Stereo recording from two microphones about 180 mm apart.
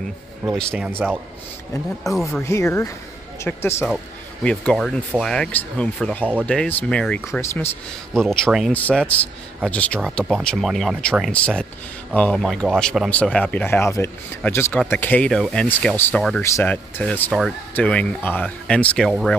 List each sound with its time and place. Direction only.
0.5 s speech: centre (ahead or behind)
0.8 s speech: 10° right (ahead or behind)
2.1 s speech: 20° left (ahead or behind); by 19.3 s centre (ahead or behind)